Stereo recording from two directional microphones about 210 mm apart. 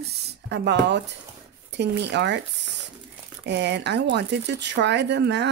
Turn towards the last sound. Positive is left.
turn(degrees=-55)  # may be behind; listen again after turning